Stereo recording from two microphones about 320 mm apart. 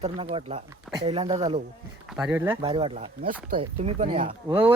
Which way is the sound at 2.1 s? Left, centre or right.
Centre.